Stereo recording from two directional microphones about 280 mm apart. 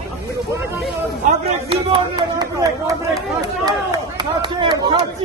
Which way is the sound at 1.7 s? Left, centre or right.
Centre.